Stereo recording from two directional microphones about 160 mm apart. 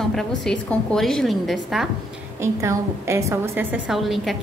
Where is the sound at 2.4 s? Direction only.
15° right (ahead or behind).